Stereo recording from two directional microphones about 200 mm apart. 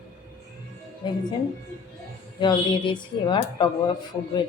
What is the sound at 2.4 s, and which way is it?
Speech, 20° left (ahead or behind).